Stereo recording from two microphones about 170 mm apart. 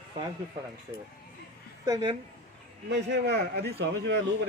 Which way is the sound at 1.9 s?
30° right (ahead or behind).